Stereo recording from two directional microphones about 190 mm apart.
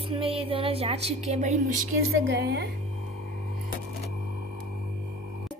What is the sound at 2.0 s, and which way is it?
Speech, 80° right.